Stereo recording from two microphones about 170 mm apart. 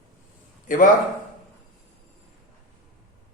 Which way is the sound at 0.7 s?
50° left (ahead or behind).